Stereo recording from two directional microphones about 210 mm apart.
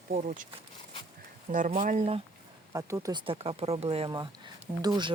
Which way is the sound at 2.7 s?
15° right (ahead or behind).